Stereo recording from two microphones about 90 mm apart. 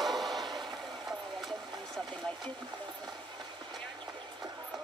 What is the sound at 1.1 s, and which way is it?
Vehicle, centre (ahead or behind).